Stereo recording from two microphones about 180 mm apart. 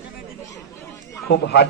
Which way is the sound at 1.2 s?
70° left (ahead or behind).